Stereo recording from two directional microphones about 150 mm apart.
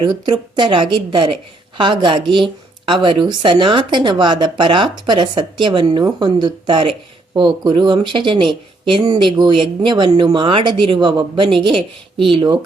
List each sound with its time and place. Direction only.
0.0 s speech: 30° right (ahead or behind)